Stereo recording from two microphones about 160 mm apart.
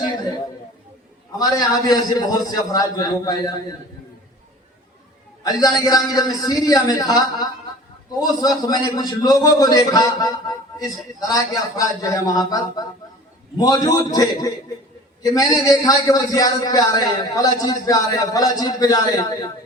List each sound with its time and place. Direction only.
1.4 s a man's voice: 20° left (ahead or behind)
5.4 s a man's voice: 25° left (ahead or behind)